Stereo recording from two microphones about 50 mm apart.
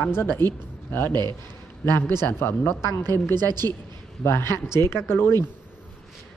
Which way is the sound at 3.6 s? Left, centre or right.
Left.